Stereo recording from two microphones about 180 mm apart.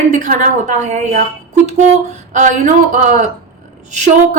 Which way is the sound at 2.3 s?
40° right (ahead or behind).